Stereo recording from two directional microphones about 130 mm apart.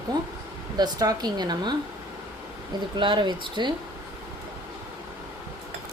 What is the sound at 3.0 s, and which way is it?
Speech, 35° right (ahead or behind).